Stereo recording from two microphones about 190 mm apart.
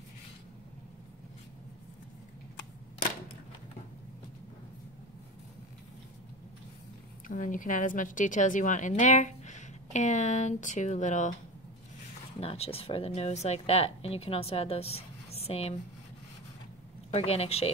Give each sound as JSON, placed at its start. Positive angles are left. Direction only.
{"t": 7.2, "sound": "a woman's voice", "side_deg": 45}
{"t": 12.4, "sound": "a woman's voice", "side_deg": 30}
{"t": 17.1, "sound": "a woman's voice", "side_deg": 35}